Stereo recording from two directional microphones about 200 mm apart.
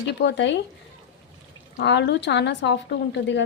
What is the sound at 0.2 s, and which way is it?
Speech, 60° left (ahead or behind).